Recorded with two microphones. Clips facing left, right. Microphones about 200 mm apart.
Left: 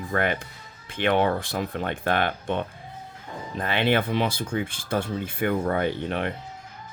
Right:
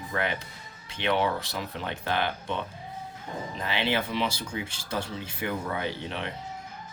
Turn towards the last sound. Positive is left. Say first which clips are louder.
# left 7 dB
turn(degrees=55)  # may be behind; listen again after turning